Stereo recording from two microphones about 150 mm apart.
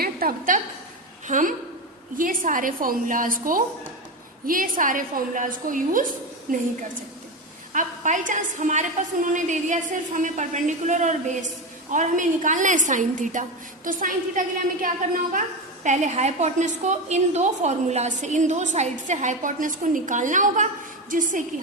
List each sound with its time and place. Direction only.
0.0 s a sound: 75° right (ahead or behind)
1.3 s a woman's voice: 60° right (ahead or behind)
7.7 s a woman's voice: 55° right (ahead or behind)